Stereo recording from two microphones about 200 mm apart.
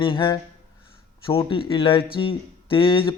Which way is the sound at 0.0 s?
25° left (ahead or behind).